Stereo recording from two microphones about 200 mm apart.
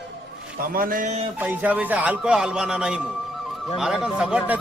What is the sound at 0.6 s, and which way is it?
Speech, 45° right (ahead or behind).